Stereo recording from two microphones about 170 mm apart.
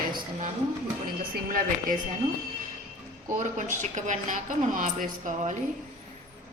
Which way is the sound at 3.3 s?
50° right (ahead or behind).